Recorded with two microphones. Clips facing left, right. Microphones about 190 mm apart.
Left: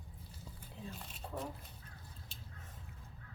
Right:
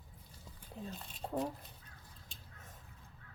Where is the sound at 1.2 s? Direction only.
40° right (ahead or behind).